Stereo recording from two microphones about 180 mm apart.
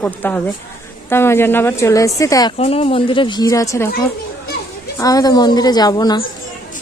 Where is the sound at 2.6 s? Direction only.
35° left (ahead or behind); by 3.8 s 20° left (ahead or behind).